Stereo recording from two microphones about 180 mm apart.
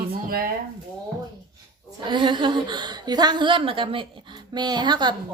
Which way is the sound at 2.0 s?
25° right (ahead or behind).